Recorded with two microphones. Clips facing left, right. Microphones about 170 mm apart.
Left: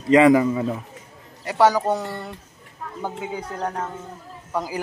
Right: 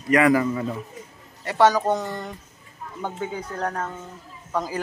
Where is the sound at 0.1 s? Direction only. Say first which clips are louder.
Left 4 dB; 20° left (ahead or behind).